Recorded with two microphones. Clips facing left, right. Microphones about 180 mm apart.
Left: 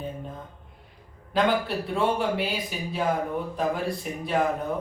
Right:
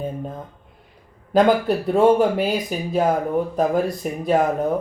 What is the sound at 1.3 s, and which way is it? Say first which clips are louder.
Speech: right 8 dB; 45° right (ahead or behind).